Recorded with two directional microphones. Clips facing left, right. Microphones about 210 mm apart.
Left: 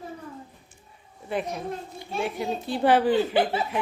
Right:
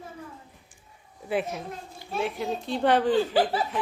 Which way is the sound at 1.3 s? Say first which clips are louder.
Even; 5° right (ahead or behind).